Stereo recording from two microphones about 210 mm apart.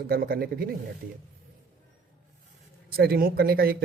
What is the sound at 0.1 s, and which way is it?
Speech, 45° right (ahead or behind).